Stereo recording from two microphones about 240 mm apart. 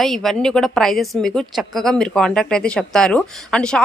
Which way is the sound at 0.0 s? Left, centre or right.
Centre.